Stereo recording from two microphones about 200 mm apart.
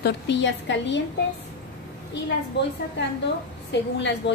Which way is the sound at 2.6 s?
60° left (ahead or behind).